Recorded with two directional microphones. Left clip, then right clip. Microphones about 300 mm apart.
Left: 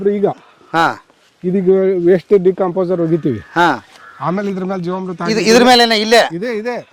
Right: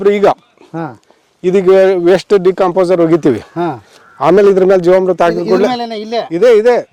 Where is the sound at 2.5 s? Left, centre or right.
Centre.